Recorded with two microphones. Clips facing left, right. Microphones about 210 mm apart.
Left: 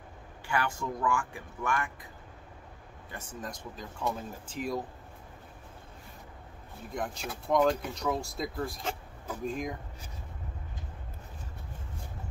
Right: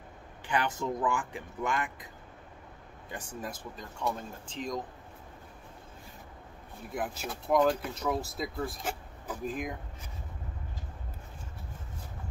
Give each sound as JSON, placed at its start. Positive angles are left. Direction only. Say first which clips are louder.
{"t": 0.5, "sound": "speech", "louder": "right 1 dB", "side_deg": -20}
{"t": 3.1, "sound": "speech", "louder": "right 1 dB", "side_deg": -15}
{"t": 6.9, "sound": "speech", "louder": "right 1 dB", "side_deg": -5}